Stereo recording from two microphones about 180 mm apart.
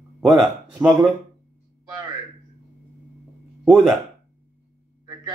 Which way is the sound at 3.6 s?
5° right (ahead or behind).